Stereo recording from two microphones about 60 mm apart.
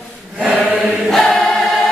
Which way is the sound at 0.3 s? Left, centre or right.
Centre.